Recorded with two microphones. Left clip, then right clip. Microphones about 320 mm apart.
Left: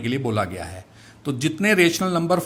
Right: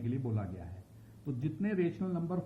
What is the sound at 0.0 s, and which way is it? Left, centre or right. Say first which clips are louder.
Speech: left 17 dB; left.